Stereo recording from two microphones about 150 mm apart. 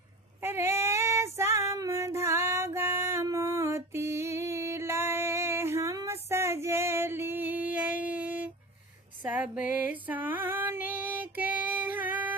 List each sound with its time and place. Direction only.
0.4 s female singing: 15° right (ahead or behind)
9.2 s music: 10° right (ahead or behind)
9.7 s female singing: 10° right (ahead or behind)